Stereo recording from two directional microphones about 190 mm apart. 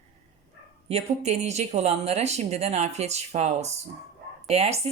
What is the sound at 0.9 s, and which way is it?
A woman's voice, 35° right (ahead or behind).